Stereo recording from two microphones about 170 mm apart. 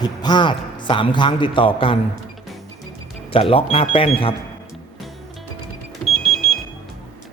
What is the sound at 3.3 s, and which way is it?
Speech, 35° left (ahead or behind).